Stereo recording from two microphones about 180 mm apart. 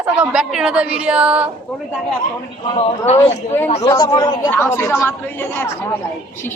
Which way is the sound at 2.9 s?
35° left (ahead or behind).